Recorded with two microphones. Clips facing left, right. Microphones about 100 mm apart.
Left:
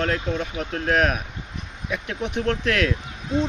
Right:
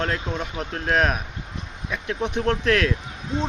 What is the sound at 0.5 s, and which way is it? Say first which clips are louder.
Speech: even; 35° right (ahead or behind).